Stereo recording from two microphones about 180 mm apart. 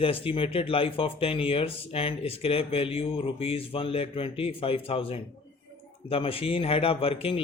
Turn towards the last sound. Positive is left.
turn(degrees=30)  # may be behind; listen again after turning